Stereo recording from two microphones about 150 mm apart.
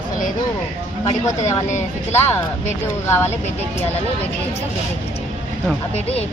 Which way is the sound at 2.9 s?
15° left (ahead or behind).